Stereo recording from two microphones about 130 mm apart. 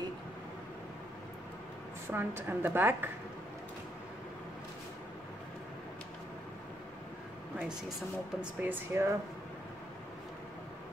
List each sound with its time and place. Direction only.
2.0 s a woman's voice: 15° right (ahead or behind)
8.4 s a woman's voice: 15° right (ahead or behind)